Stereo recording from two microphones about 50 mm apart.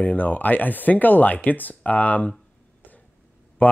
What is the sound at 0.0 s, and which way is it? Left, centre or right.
Speech, left.